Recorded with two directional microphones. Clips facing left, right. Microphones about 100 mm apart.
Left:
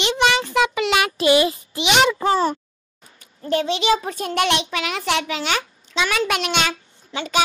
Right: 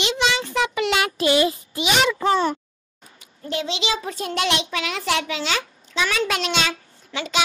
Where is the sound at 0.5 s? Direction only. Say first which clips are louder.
Left 3 dB; 90° left.